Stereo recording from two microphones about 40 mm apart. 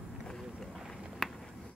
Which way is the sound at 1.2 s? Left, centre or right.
Centre.